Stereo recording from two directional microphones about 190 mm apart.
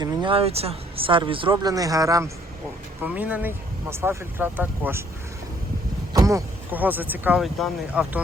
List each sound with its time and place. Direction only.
0.0 s speech: 25° right (ahead or behind)
6.1 s speech: 15° right (ahead or behind)